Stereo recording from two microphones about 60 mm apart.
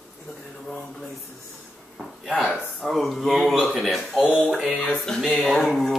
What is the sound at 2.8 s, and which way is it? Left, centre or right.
Speech, centre.